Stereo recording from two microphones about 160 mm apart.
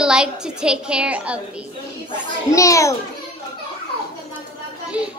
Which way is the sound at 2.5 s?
20° left (ahead or behind).